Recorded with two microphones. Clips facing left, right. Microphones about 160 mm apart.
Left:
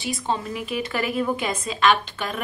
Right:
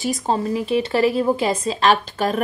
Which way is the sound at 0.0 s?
40° right (ahead or behind).